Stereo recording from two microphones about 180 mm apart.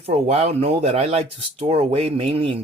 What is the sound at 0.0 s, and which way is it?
Speech, 35° right (ahead or behind).